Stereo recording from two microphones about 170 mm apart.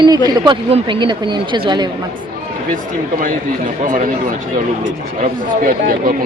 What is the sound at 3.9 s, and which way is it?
Speech, 50° right (ahead or behind).